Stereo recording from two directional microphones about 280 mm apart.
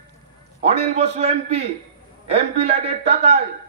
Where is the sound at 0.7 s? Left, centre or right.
Right.